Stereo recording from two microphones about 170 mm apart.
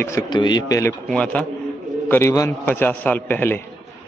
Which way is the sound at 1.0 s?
5° left (ahead or behind).